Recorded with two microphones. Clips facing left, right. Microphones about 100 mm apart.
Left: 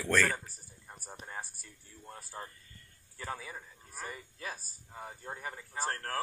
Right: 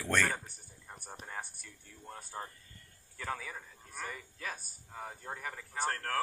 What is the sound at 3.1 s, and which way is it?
Speech, 15° left (ahead or behind).